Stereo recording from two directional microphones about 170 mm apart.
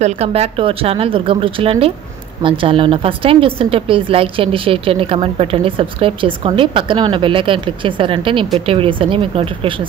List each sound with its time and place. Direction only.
0.0 s a woman's voice: 40° right (ahead or behind)